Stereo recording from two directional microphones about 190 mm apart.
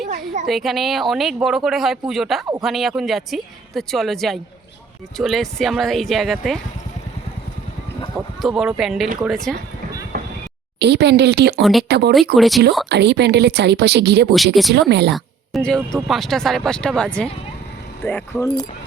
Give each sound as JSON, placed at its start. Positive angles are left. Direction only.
{"t": 0.4, "sound": "speech", "side_deg": 0}
{"t": 8.4, "sound": "speech", "side_deg": 0}
{"t": 10.8, "sound": "speech", "side_deg": -60}
{"t": 11.6, "sound": "speech", "side_deg": 0}
{"t": 11.9, "sound": "speech", "side_deg": -60}
{"t": 12.4, "sound": "speech", "side_deg": 0}
{"t": 12.9, "sound": "speech", "side_deg": -60}
{"t": 14.3, "sound": "speech", "side_deg": 0}
{"t": 14.8, "sound": "speech", "side_deg": -60}
{"t": 15.1, "sound": "speech", "side_deg": 0}